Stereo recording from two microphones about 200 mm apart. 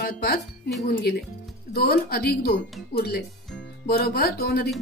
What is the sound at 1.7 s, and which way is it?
Speech, 50° left (ahead or behind).